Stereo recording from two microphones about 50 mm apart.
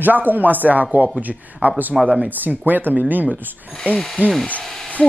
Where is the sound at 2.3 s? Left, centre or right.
Right.